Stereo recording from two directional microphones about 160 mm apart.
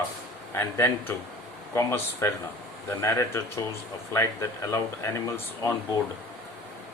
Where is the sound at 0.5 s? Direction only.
15° left (ahead or behind).